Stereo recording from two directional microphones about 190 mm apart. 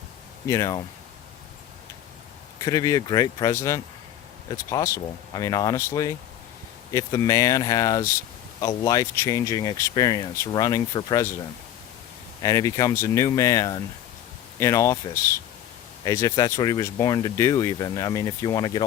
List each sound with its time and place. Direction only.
0.4 s speech: 15° left (ahead or behind)
2.6 s speech: 15° left (ahead or behind)
12.4 s speech: 20° left (ahead or behind)